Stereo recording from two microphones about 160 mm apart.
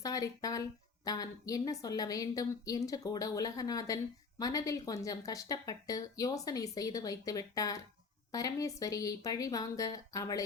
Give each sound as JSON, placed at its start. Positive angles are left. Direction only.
{"t": 0.0, "sound": "a woman's voice", "side_deg": 20}